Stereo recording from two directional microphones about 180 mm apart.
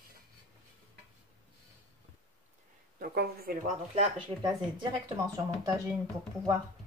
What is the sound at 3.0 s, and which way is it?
Speech, 60° right (ahead or behind).